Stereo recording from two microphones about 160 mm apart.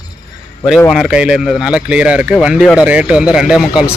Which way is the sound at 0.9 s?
Centre (ahead or behind).